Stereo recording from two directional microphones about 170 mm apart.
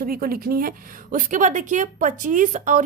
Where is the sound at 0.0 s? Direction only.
60° right (ahead or behind).